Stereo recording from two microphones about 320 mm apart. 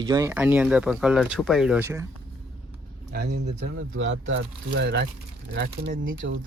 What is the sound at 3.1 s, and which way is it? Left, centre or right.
Speech, right.